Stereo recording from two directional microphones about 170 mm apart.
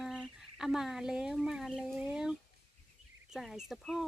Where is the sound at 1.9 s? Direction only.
5° right (ahead or behind).